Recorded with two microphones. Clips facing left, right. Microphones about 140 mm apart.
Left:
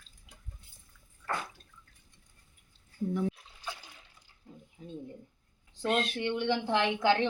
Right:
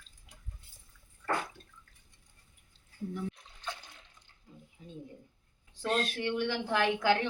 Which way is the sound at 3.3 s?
10° left (ahead or behind).